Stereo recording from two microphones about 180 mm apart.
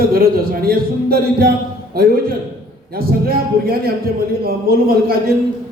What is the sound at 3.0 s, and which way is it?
A man's voice, 55° right (ahead or behind).